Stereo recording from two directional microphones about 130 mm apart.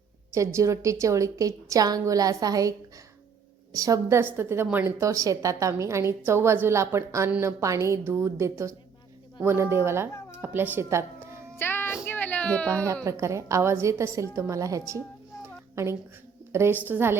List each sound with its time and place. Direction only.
0.3 s a woman's voice: 20° right (ahead or behind)
7.3 s speech: 10° right (ahead or behind)
7.6 s a woman's voice: 25° right (ahead or behind)
11.5 s child singing: 15° left (ahead or behind)
12.0 s a sound: 15° left (ahead or behind)
13.1 s a woman's voice: 20° right (ahead or behind)